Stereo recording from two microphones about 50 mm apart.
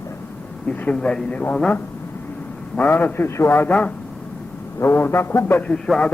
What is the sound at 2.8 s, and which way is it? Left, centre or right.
Speech, left.